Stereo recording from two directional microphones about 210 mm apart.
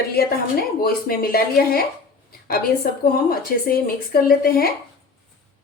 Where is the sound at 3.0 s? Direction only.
45° left (ahead or behind).